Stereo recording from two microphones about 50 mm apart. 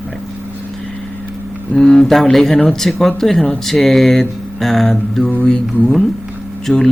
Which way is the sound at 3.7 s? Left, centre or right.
Centre.